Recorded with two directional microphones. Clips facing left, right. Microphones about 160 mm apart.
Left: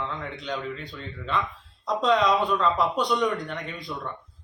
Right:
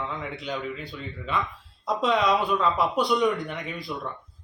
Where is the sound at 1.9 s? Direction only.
5° right (ahead or behind).